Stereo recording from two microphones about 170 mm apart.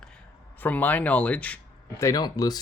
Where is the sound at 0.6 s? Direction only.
10° left (ahead or behind).